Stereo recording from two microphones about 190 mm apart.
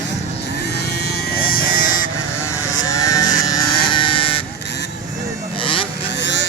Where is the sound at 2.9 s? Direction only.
15° left (ahead or behind).